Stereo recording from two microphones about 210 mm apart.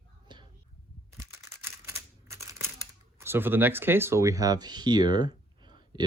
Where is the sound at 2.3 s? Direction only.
15° right (ahead or behind).